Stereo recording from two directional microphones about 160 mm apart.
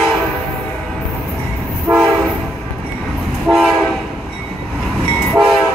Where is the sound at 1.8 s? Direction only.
15° right (ahead or behind).